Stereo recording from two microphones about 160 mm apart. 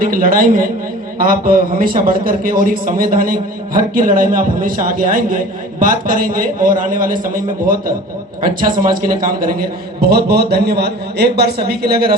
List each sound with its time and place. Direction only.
0.0 s a man's voice: 60° right (ahead or behind)
10.0 s speech: 80° right